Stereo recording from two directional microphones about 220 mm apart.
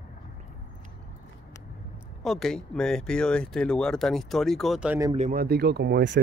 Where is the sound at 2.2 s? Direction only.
Centre (ahead or behind).